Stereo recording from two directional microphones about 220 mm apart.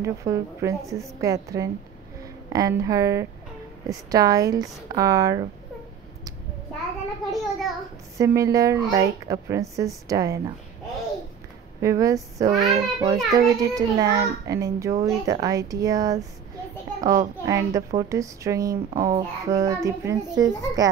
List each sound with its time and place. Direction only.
0.0 s a woman's voice: 15° right (ahead or behind)
7.2 s a sound: centre (ahead or behind)
8.2 s a woman's voice: 15° right (ahead or behind)
11.8 s a woman's voice: 15° right (ahead or behind)